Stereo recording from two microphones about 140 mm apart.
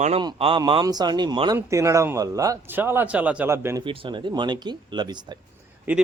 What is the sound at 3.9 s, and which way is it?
Speech, 35° right (ahead or behind).